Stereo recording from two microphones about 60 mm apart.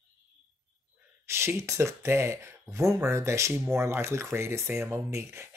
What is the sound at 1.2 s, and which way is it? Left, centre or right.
Speech, right.